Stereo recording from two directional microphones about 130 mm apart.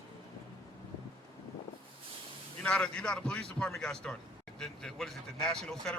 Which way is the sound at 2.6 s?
5° left (ahead or behind).